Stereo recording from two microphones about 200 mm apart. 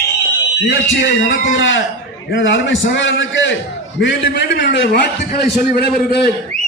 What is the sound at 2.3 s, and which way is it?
A man's voice, 65° left (ahead or behind).